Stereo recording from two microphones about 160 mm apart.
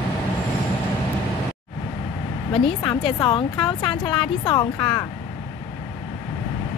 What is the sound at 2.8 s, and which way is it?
Speech, 30° left (ahead or behind).